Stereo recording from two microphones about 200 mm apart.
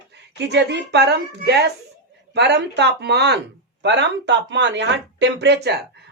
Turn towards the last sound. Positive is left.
turn(degrees=-55)  # may be behind; listen again after turning